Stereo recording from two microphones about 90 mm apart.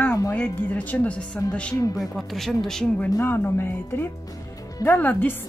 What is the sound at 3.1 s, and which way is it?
A woman's voice, 25° left (ahead or behind).